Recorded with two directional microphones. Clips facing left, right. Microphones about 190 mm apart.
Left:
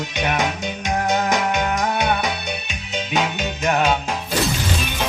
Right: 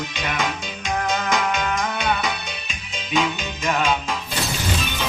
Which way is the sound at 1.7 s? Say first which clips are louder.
Left 3 dB; 40° left (ahead or behind).